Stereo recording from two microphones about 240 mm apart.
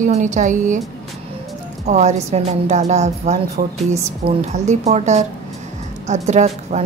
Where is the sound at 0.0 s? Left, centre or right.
Right.